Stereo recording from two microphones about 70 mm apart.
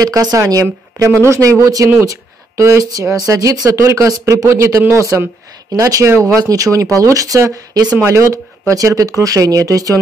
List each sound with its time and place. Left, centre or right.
0.0 s a woman's voice: right
2.9 s a woman's voice: right
3.7 s speech: right
8.0 s a woman's voice: right